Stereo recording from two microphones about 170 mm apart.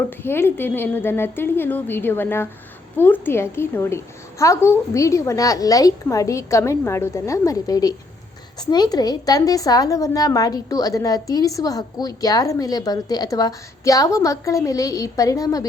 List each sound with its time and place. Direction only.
0.1 s a woman's voice: 15° left (ahead or behind)